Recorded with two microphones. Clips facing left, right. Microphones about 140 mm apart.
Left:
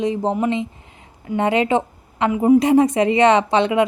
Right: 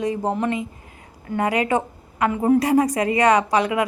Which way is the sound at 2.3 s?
15° left (ahead or behind).